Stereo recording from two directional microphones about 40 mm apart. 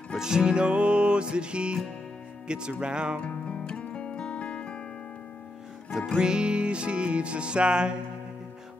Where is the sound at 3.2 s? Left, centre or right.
Left.